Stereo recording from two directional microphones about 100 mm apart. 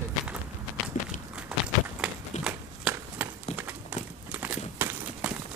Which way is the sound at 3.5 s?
90° left.